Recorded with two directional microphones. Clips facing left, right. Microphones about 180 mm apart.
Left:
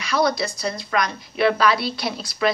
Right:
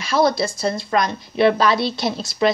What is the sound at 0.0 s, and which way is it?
Speech, 25° right (ahead or behind).